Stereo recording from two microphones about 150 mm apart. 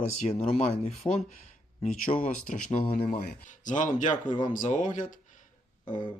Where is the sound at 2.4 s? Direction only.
55° left (ahead or behind).